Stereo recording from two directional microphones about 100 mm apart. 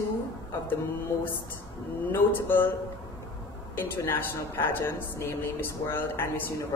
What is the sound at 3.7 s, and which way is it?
A woman's voice, 20° left (ahead or behind).